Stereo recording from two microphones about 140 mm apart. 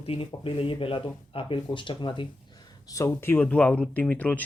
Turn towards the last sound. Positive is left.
turn(degrees=10)  # may be behind; listen again after turning